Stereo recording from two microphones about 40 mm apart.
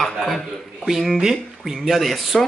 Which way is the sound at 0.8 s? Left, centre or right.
Centre.